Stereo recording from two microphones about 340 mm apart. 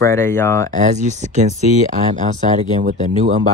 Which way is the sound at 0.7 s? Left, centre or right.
Right.